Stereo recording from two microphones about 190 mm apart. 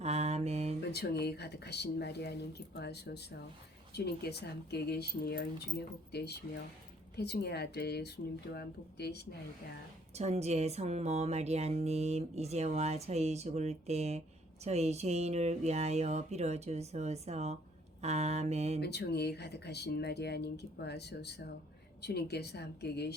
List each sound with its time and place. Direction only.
0.0 s mantra: 35° right (ahead or behind)
0.8 s speech: 60° left (ahead or behind)
10.2 s speech: 35° right (ahead or behind)
18.8 s speech: 60° left (ahead or behind)